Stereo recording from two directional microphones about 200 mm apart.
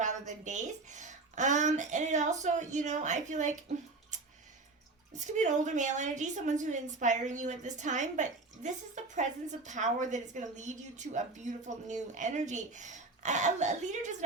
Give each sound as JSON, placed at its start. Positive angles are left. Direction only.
{"t": 0.0, "sound": "a woman's voice", "side_deg": -35}
{"t": 4.1, "sound": "tick", "side_deg": -35}
{"t": 5.1, "sound": "a woman's voice", "side_deg": -35}